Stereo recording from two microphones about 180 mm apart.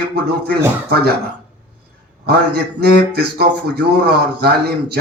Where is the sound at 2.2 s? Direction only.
60° right (ahead or behind).